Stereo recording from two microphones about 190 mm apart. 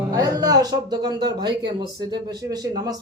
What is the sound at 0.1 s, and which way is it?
Speech, 20° right (ahead or behind).